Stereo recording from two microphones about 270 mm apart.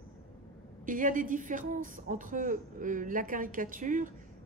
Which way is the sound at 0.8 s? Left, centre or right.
Right.